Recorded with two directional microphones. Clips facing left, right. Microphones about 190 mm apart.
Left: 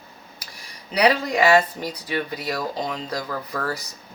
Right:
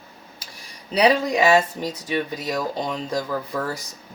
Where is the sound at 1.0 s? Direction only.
25° right (ahead or behind).